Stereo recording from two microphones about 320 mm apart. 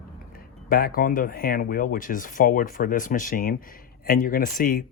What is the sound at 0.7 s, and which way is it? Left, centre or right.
Speech, left.